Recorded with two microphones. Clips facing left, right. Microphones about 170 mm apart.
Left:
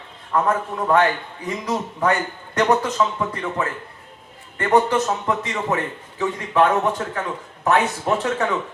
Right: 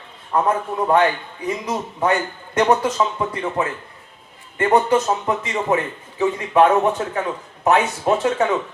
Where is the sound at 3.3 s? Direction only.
20° right (ahead or behind).